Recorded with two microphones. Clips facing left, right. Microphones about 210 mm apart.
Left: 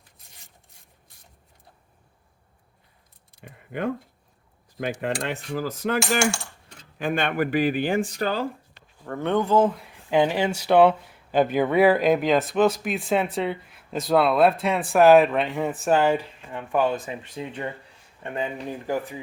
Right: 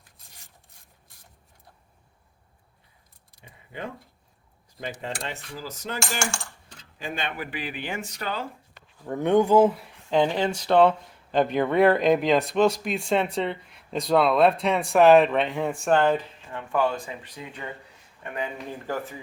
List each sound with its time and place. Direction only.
3.4 s speech: 55° left (ahead or behind)
4.8 s cutlery: 60° left (ahead or behind)
7.0 s speech: 55° left (ahead or behind)
8.0 s speech: 35° left (ahead or behind)
9.0 s speech: 15° right (ahead or behind)
10.1 s speech: 5° left (ahead or behind); by 18.6 s 25° left (ahead or behind)
18.9 s speech: 15° left (ahead or behind)